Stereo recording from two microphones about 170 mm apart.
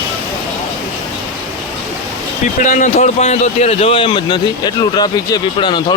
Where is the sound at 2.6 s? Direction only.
45° left (ahead or behind).